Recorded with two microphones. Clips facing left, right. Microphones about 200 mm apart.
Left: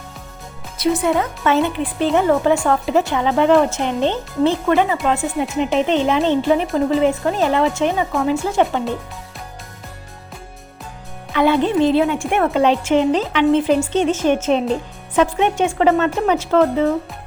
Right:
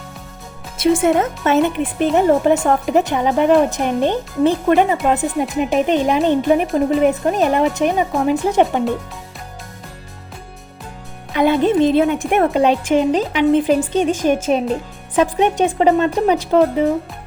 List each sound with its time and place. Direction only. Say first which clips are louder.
1.1 s speech: right 2 dB; 55° right (ahead or behind)
1.5 s a woman's voice: right 5 dB; 20° right (ahead or behind)
11.3 s a woman's voice: right 1 dB; 15° right (ahead or behind)